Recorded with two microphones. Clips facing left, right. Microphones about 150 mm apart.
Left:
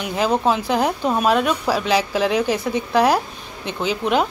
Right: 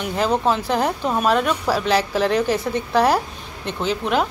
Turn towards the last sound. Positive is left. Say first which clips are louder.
# left 1 dB
turn(degrees=5)  # may be behind; listen again after turning